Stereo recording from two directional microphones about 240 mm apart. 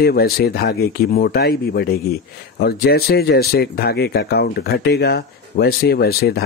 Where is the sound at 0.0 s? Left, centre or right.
Left.